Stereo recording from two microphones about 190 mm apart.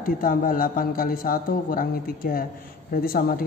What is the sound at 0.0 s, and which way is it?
Speech, 50° left (ahead or behind).